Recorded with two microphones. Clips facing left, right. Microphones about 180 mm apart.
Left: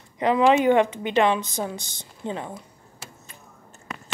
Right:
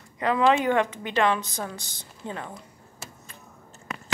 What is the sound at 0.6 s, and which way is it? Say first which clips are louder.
Speech: left 5 dB; 20° left (ahead or behind).